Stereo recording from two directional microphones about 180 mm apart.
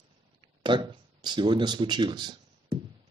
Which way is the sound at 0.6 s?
25° right (ahead or behind).